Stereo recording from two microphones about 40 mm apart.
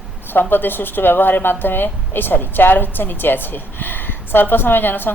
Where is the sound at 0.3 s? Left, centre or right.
Left.